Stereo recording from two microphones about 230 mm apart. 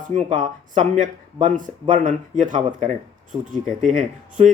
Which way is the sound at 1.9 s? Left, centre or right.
Right.